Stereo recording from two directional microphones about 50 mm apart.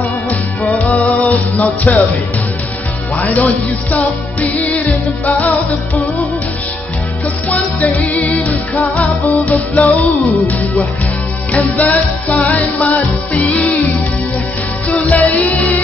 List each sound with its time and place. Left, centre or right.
0.7 s music: left
3.3 s music: left
7.4 s music: left
11.7 s music: left
14.9 s music: left